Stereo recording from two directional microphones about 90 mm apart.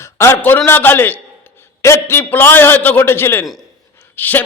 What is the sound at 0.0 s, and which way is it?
A man's voice, 30° left (ahead or behind).